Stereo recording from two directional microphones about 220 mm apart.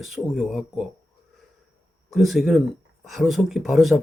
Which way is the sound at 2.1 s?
Centre (ahead or behind).